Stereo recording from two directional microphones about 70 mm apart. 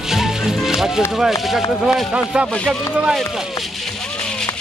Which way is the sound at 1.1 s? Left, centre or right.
Centre.